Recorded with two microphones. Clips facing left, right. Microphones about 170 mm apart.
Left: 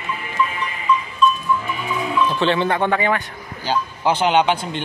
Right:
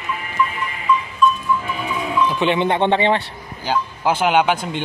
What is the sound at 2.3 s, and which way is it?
Mantra, 15° right (ahead or behind).